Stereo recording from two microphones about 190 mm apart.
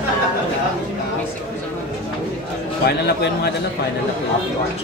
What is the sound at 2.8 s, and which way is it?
Speech, 60° left (ahead or behind).